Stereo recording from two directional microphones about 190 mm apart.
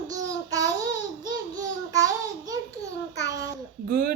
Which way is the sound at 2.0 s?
20° right (ahead or behind).